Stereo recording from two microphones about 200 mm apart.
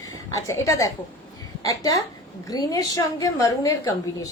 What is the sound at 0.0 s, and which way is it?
Speech, 15° left (ahead or behind).